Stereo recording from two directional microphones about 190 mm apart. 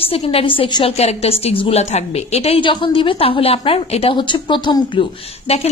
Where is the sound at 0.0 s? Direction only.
30° left (ahead or behind).